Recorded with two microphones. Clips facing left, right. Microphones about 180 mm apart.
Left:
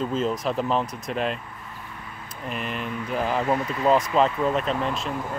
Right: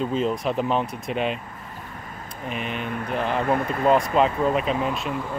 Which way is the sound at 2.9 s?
55° right (ahead or behind).